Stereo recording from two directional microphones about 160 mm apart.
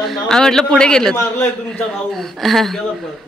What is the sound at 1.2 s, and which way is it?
Speech, 15° left (ahead or behind).